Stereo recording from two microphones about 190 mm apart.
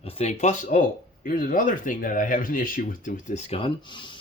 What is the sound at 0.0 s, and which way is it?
Speech, 30° left (ahead or behind).